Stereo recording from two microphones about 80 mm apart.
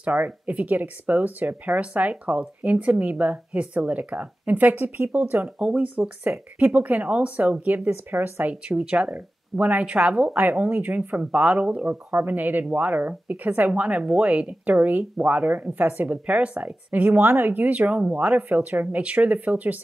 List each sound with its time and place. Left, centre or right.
0.0 s speech: centre